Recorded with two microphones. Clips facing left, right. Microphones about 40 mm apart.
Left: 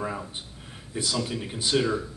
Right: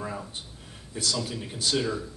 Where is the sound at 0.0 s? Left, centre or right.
Centre.